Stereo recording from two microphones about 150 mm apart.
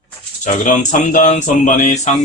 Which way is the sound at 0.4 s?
55° left (ahead or behind).